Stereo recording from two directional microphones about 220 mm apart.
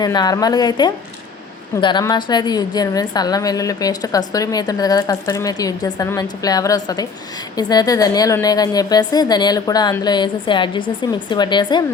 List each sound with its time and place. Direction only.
0.0 s a woman's voice: 20° left (ahead or behind)